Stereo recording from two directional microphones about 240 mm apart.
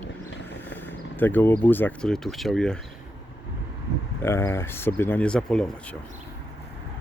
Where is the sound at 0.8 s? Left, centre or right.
Centre.